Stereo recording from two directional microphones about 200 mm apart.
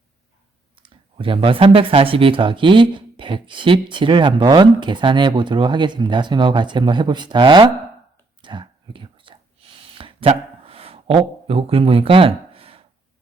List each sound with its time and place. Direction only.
0.8 s speech: 25° right (ahead or behind)
8.4 s whispering: 25° right (ahead or behind)
9.9 s a sound: 25° right (ahead or behind)
11.4 s speech: 30° right (ahead or behind)